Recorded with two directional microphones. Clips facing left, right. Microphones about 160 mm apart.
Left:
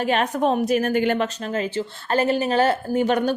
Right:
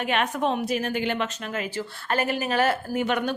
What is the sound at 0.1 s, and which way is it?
A woman's voice, 40° left (ahead or behind).